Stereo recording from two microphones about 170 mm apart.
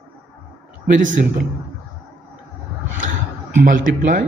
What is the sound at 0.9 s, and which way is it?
Speech, 50° right (ahead or behind).